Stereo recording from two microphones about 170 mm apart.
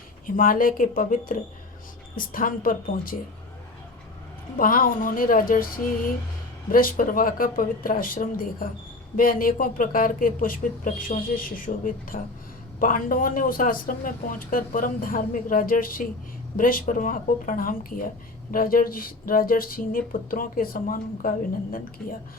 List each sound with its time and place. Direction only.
0.3 s speech: 55° left (ahead or behind)
4.5 s speech: 55° left (ahead or behind)
6.7 s speech: 55° left (ahead or behind)